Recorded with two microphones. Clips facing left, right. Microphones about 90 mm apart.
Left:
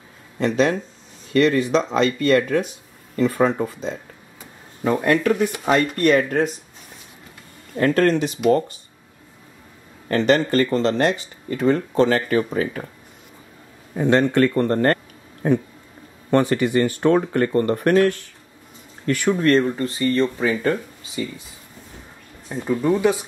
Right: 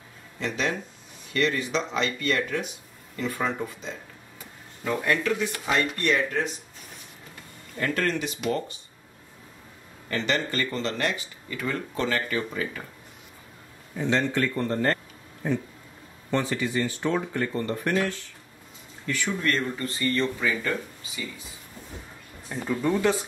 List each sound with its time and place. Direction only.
0.4 s speech: 40° left (ahead or behind)
7.7 s speech: 45° left (ahead or behind)
10.0 s speech: 45° left (ahead or behind)
13.9 s speech: 55° left (ahead or behind)
19.4 s speech: 30° left (ahead or behind)
22.5 s speech: 10° left (ahead or behind)